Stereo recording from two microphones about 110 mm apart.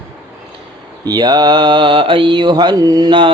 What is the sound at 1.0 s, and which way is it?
Mantra, 40° right (ahead or behind).